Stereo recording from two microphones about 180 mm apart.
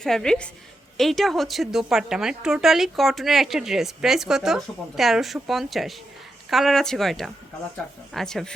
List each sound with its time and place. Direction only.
0.0 s a woman's voice: 5° left (ahead or behind)